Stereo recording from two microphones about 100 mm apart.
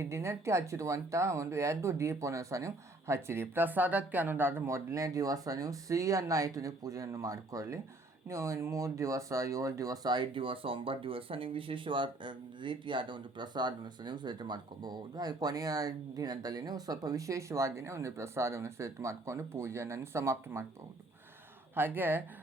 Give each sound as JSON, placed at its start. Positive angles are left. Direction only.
{"t": 0.0, "sound": "speech", "side_deg": -25}
{"t": 21.8, "sound": "speech", "side_deg": -20}